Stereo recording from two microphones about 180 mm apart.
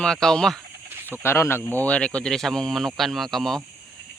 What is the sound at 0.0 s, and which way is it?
Speech, 5° left (ahead or behind).